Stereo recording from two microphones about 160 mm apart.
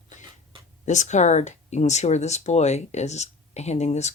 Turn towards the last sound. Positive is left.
turn(degrees=45)  # may be behind; listen again after turning